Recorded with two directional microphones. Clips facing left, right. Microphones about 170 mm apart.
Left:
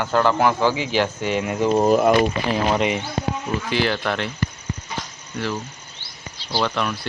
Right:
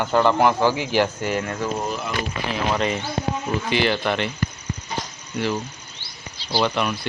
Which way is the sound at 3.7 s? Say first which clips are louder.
Right 1 dB; centre (ahead or behind).